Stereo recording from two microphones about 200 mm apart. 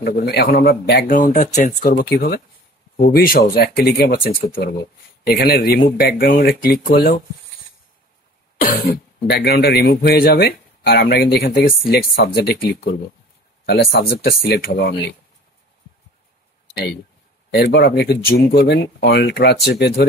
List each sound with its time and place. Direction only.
0.0 s speech: 55° left (ahead or behind)
8.5 s speech: 45° left (ahead or behind)
17.5 s speech: 55° left (ahead or behind)